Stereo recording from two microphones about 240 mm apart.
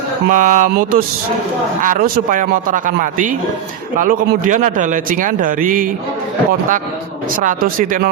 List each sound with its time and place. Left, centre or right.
0.3 s a man's voice: right
7.3 s a man's voice: right